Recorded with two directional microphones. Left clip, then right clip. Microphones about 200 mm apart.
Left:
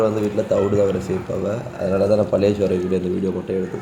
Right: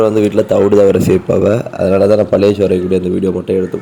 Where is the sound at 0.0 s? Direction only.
40° right (ahead or behind).